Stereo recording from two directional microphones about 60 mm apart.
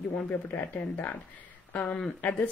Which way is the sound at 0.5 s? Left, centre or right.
Left.